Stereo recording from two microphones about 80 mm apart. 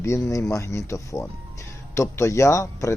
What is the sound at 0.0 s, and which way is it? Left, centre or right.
Speech, left.